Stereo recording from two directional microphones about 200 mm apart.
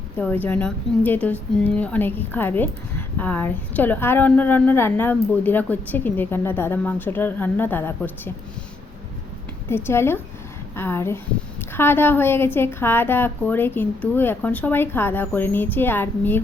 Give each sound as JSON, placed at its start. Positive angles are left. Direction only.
{"t": 0.2, "sound": "a woman's voice", "side_deg": 10}
{"t": 9.6, "sound": "a woman's voice", "side_deg": 10}